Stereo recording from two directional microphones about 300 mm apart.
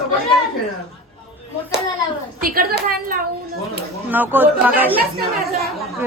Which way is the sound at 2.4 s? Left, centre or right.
Right.